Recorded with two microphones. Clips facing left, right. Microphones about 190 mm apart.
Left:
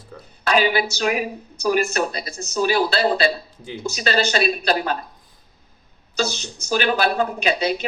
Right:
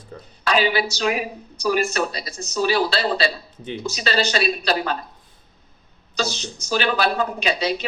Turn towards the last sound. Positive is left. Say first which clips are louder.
# left 2 dB
turn(degrees=50)  # may be behind; listen again after turning